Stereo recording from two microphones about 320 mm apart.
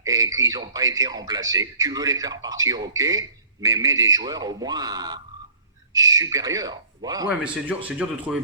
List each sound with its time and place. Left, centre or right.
0.0 s a man's voice: centre